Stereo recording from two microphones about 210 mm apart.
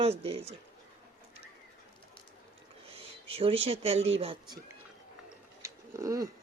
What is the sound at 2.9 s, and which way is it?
A man's voice, 25° right (ahead or behind).